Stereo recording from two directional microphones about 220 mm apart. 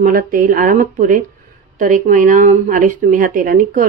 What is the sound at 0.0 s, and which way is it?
Speech, 40° right (ahead or behind).